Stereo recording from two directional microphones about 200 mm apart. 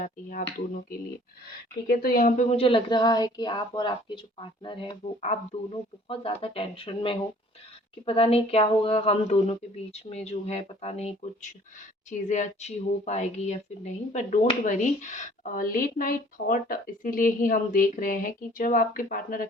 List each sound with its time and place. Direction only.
0.0 s a woman's voice: 40° left (ahead or behind)